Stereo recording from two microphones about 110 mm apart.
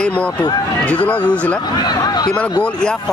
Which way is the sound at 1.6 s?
40° left (ahead or behind).